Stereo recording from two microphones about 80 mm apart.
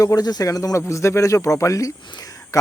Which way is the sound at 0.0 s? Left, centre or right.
Left.